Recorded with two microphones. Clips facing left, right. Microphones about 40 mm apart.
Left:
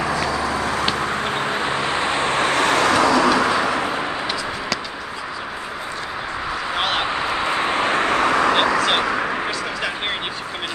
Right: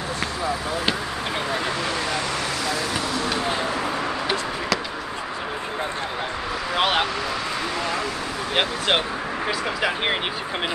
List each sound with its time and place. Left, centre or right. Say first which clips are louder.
1.5 s vehicle: left 3 dB; left
7.2 s vehicle: left 6 dB; left
8.5 s vehicle: left 4 dB; centre
9.8 s a sound: right 1 dB; centre